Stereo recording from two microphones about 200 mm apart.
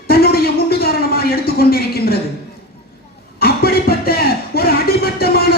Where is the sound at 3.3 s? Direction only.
50° left (ahead or behind).